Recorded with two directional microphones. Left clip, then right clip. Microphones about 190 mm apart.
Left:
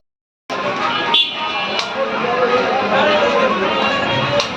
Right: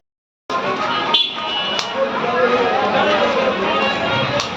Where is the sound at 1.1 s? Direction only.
40° left (ahead or behind).